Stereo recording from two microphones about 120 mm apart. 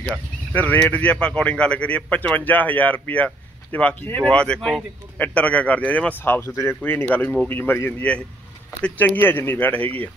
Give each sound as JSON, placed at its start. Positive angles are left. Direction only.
{"t": 0.5, "sound": "speech", "side_deg": 15}
{"t": 5.2, "sound": "speech", "side_deg": 10}